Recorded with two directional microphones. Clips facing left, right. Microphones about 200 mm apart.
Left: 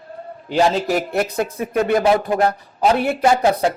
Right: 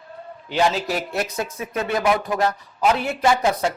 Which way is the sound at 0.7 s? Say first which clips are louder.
Left 5 dB; 50° left (ahead or behind).